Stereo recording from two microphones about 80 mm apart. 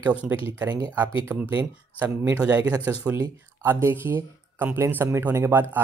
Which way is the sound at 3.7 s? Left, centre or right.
Right.